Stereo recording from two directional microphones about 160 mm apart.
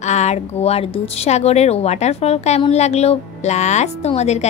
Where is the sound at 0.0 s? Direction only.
45° left (ahead or behind).